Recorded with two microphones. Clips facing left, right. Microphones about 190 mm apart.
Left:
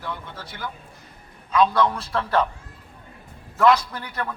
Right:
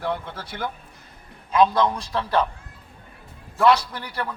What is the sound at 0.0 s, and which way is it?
Speech, 60° right (ahead or behind).